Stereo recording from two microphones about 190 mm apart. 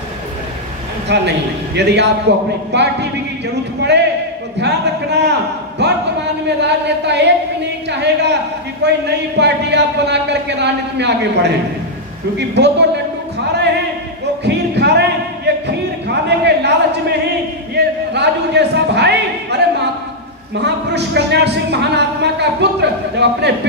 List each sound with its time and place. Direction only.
1.0 s a man's voice: 65° right (ahead or behind)
4.6 s a man's voice: 65° right (ahead or behind)
14.4 s a sound: 60° right (ahead or behind)
20.6 s speech: 60° right (ahead or behind)